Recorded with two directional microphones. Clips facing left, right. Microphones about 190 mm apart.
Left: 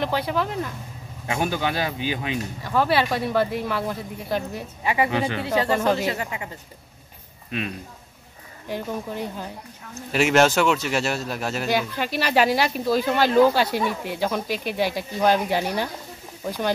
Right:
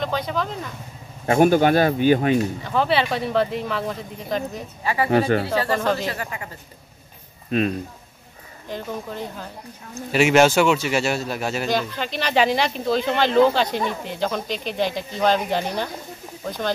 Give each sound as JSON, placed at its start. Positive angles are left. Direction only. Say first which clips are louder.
{"t": 0.0, "sound": "speech", "louder": "left 1 dB", "side_deg": 10}
{"t": 1.2, "sound": "speech", "louder": "right 9 dB", "side_deg": -45}
{"t": 2.6, "sound": "speech", "louder": "even", "side_deg": 5}
{"t": 4.8, "sound": "speech", "louder": "right 3 dB", "side_deg": 20}
{"t": 5.8, "sound": "speech", "louder": "left 1 dB", "side_deg": 10}
{"t": 7.5, "sound": "speech", "louder": "right 8 dB", "side_deg": -40}
{"t": 8.6, "sound": "speech", "louder": "left 1 dB", "side_deg": 10}
{"t": 9.9, "sound": "speech", "louder": "right 2 dB", "side_deg": 0}